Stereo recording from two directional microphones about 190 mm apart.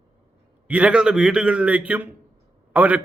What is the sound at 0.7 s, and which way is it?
A man's voice, 5° right (ahead or behind).